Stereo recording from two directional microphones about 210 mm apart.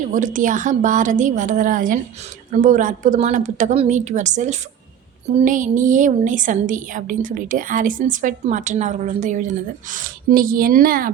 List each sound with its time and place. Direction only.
0.1 s a woman's voice: 40° right (ahead or behind)